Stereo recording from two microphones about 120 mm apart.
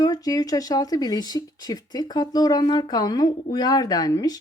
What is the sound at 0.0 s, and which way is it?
Speech, 30° left (ahead or behind).